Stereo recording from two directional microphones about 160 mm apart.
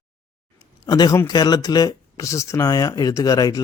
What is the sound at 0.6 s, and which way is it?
Speech, 25° left (ahead or behind).